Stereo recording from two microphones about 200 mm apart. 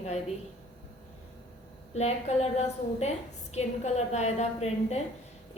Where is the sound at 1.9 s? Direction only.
35° left (ahead or behind).